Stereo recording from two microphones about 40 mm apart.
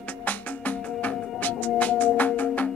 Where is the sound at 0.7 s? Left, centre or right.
Left.